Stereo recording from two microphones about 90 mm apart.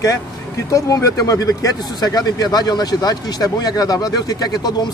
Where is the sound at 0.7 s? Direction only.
35° left (ahead or behind).